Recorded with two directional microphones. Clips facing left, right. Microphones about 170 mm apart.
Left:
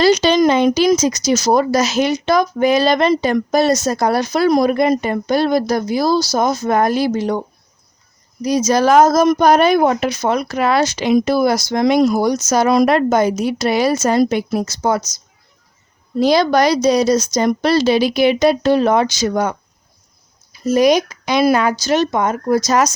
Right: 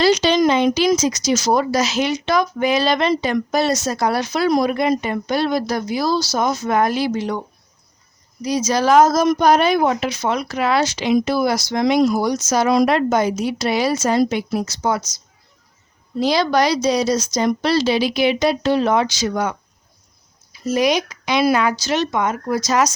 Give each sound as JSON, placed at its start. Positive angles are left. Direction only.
{"t": 0.0, "sound": "speech", "side_deg": 45}
{"t": 16.2, "sound": "speech", "side_deg": 45}